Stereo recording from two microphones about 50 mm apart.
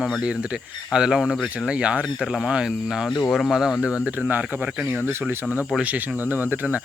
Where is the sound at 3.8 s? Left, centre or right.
Right.